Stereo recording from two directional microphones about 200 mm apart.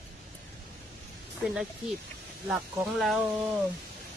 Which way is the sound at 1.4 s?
Centre (ahead or behind).